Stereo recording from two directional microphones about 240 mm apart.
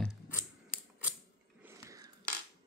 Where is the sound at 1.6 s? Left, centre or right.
Centre.